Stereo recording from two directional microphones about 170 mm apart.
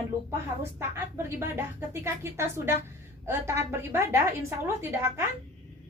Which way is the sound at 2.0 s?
15° right (ahead or behind).